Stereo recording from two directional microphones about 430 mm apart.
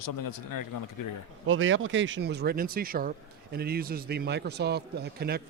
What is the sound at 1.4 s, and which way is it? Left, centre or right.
Speech, right.